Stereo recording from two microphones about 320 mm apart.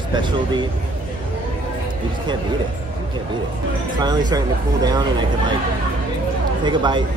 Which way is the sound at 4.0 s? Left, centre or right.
Centre.